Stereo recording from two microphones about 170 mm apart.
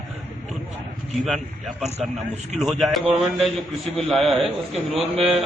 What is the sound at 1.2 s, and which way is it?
A man's voice, centre (ahead or behind).